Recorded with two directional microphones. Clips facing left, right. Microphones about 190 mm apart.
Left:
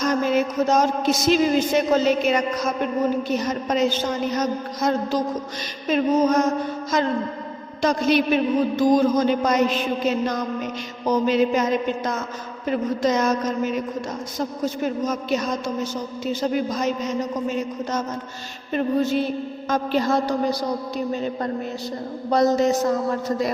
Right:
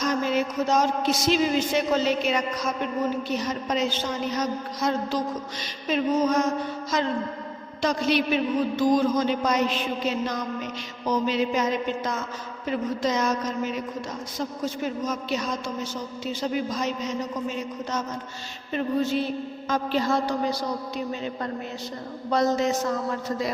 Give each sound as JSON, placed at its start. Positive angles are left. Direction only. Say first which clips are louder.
{"t": 0.0, "sound": "a man's voice", "louder": "left 4 dB", "side_deg": 50}